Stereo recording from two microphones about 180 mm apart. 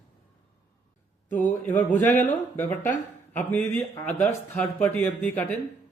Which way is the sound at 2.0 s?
45° left (ahead or behind).